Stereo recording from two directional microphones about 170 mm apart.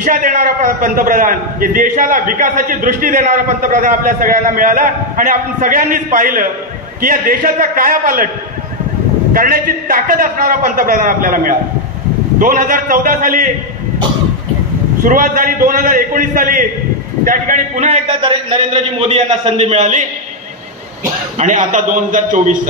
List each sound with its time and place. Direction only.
0.0 s a man's voice: 55° right (ahead or behind)
9.3 s a man's voice: 60° right (ahead or behind)
15.0 s a man's voice: 55° right (ahead or behind)
18.0 s a man's voice: 30° right (ahead or behind); by 20.1 s 45° right (ahead or behind)
21.4 s a man's voice: 50° right (ahead or behind)